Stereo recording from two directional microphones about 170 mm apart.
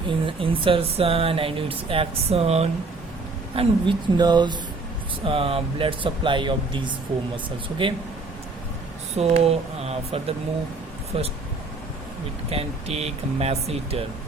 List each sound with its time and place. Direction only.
0.3 s speech: 30° right (ahead or behind)
9.1 s speech: 40° right (ahead or behind)
12.5 s speech: 35° right (ahead or behind)